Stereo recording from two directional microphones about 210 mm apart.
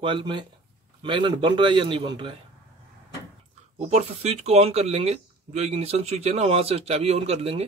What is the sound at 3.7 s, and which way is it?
Speech, 30° right (ahead or behind).